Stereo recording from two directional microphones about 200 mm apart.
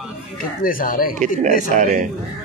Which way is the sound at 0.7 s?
45° left (ahead or behind).